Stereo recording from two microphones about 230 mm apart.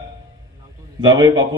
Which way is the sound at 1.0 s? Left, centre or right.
Centre.